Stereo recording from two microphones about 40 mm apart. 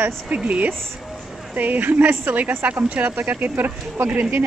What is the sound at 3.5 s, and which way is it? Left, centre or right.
Speech, right.